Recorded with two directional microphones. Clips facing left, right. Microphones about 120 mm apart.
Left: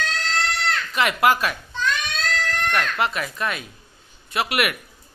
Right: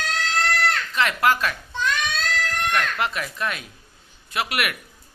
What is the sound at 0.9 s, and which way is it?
Speech, 15° left (ahead or behind).